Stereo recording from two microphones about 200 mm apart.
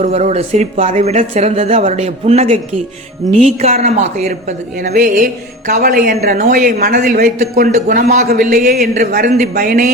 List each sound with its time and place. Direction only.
0.0 s speech: 35° right (ahead or behind)
4.9 s speech: 45° right (ahead or behind)